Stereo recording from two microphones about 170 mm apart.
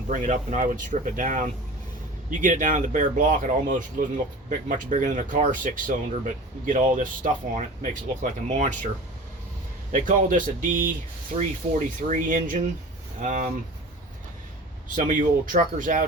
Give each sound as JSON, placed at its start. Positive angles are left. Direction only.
{"t": 0.1, "sound": "speech", "side_deg": -50}
{"t": 9.9, "sound": "speech", "side_deg": -50}
{"t": 12.0, "sound": "speech", "side_deg": -50}
{"t": 14.9, "sound": "speech", "side_deg": -50}